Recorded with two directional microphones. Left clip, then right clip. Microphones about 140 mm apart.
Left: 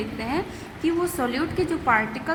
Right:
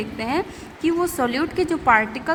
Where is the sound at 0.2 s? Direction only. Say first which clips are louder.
Right 6 dB; 45° right (ahead or behind).